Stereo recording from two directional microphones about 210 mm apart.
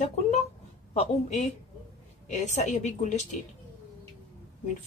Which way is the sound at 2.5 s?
35° left (ahead or behind).